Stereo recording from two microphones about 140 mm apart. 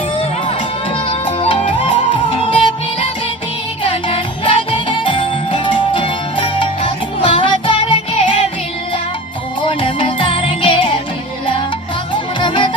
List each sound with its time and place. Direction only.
1.0 s music: 40° left (ahead or behind)
3.8 s music: 40° left (ahead or behind)
9.6 s music: 35° left (ahead or behind)
12.1 s music: 35° left (ahead or behind)